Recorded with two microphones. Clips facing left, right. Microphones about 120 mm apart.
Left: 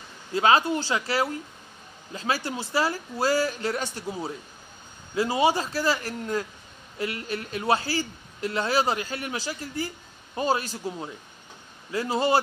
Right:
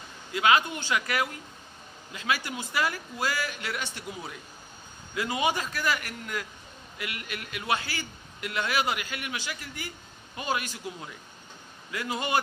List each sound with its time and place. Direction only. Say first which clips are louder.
0.3 s a man's voice: left 3 dB; 35° left (ahead or behind)